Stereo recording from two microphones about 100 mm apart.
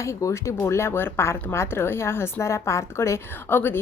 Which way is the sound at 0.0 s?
30° left (ahead or behind).